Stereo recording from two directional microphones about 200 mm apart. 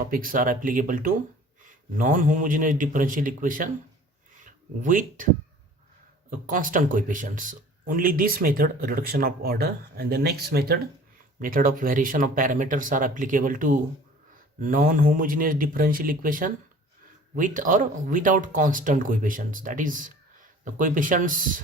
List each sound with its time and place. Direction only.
0.0 s speech: 45° right (ahead or behind)
6.5 s speech: 40° right (ahead or behind)